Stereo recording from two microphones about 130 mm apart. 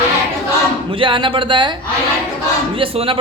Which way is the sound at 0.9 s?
40° right (ahead or behind).